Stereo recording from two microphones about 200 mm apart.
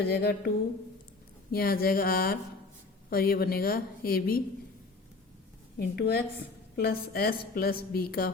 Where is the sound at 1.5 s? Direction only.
50° left (ahead or behind).